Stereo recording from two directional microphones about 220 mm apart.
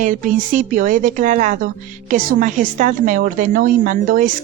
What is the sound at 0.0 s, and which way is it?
Speech, 35° right (ahead or behind).